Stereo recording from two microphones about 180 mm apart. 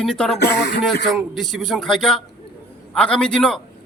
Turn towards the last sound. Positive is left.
turn(degrees=5)  # may be behind; listen again after turning